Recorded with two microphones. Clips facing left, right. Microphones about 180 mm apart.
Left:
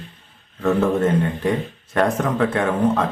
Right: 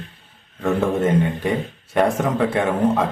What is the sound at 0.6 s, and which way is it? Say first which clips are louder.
Speech: left 2 dB; 10° right (ahead or behind).